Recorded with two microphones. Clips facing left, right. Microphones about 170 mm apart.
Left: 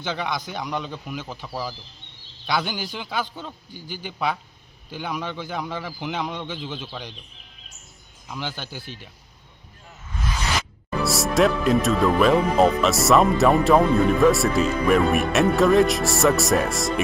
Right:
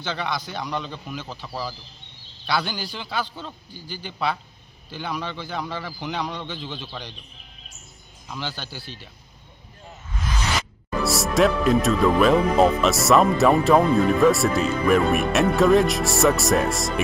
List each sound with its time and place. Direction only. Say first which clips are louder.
0.0 s a man's voice: left 1 dB; 15° left (ahead or behind)
2.6 s a man's voice: left 1 dB; 15° left (ahead or behind)
8.3 s a man's voice: left 1 dB; 15° left (ahead or behind)
11.0 s speech: even; centre (ahead or behind)